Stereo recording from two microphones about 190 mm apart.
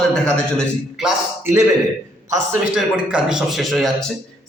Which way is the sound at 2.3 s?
10° right (ahead or behind).